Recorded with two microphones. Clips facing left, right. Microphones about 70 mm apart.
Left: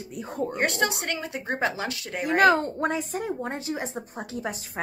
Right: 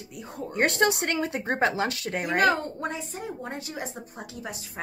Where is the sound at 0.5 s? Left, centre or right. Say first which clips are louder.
Right 5 dB; right.